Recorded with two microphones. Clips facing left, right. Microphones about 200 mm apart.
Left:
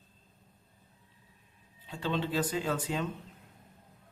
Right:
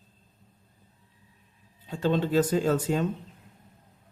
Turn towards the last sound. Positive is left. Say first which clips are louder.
# right 7 dB
turn(degrees=-45)  # may be behind; listen again after turning